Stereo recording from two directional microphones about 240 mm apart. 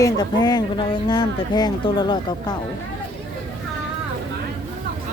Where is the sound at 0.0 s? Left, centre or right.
Centre.